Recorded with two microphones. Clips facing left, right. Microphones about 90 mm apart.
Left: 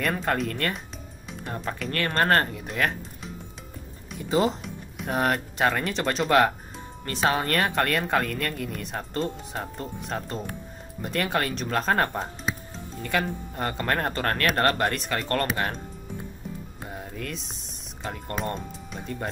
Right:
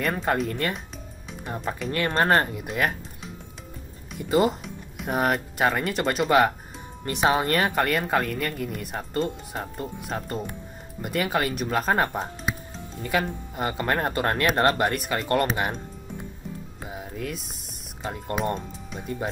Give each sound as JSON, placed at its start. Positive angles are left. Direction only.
{"t": 0.0, "sound": "speech", "side_deg": -5}
{"t": 4.2, "sound": "speech", "side_deg": -5}
{"t": 7.1, "sound": "speech", "side_deg": -15}
{"t": 14.5, "sound": "speech", "side_deg": -20}
{"t": 14.8, "sound": "speech", "side_deg": -5}
{"t": 16.8, "sound": "music", "side_deg": -5}
{"t": 18.0, "sound": "speech", "side_deg": -5}